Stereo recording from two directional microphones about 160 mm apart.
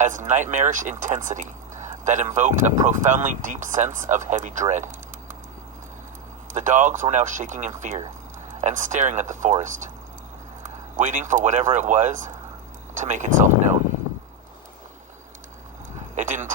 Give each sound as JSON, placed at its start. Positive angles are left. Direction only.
{"t": 0.0, "sound": "speech", "side_deg": -50}
{"t": 6.5, "sound": "speech", "side_deg": -50}
{"t": 10.9, "sound": "speech", "side_deg": -50}
{"t": 16.1, "sound": "speech", "side_deg": -50}